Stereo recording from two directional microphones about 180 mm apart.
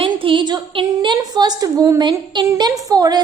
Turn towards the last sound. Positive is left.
turn(degrees=-20)  # may be behind; listen again after turning